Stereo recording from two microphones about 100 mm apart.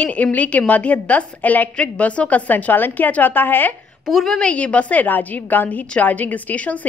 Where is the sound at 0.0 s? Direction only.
15° left (ahead or behind).